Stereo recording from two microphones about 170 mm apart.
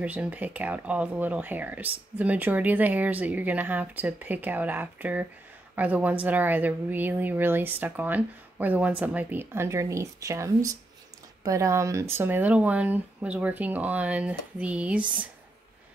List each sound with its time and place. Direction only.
0.0 s speech: 10° right (ahead or behind)